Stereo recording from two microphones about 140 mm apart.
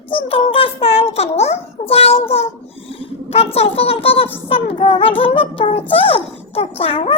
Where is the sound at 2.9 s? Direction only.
45° left (ahead or behind).